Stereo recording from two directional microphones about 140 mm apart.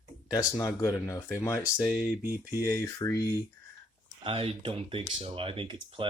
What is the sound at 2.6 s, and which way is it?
Speech, 20° left (ahead or behind).